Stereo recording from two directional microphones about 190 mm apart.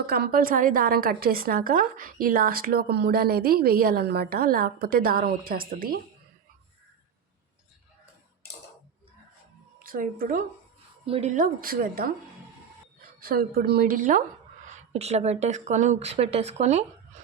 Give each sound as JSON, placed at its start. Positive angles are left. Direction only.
{"t": 0.1, "sound": "a woman's voice", "side_deg": -50}
{"t": 9.8, "sound": "a woman's voice", "side_deg": -50}
{"t": 11.0, "sound": "speech", "side_deg": -30}
{"t": 11.3, "sound": "a woman's voice", "side_deg": -45}
{"t": 13.2, "sound": "a woman's voice", "side_deg": -50}
{"t": 14.7, "sound": "speech", "side_deg": -35}